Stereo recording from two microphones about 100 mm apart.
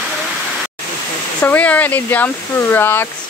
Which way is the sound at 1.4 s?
15° left (ahead or behind).